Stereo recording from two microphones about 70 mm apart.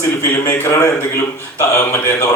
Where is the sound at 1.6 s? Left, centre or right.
Left.